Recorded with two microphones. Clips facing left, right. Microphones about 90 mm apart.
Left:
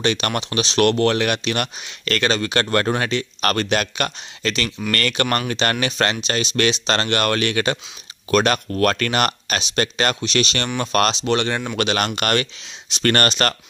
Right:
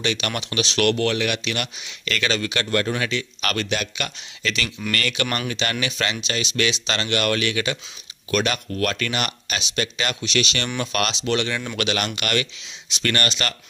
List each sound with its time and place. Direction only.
0.0 s speech: 40° left (ahead or behind)
1.1 s speech: 45° left (ahead or behind)